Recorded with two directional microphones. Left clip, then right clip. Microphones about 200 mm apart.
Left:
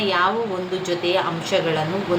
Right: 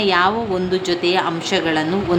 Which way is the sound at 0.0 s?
45° right (ahead or behind).